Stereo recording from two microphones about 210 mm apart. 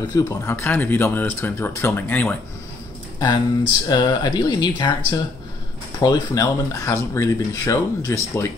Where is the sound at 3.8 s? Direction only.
20° left (ahead or behind).